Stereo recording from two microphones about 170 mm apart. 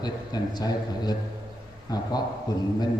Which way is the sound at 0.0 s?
25° left (ahead or behind).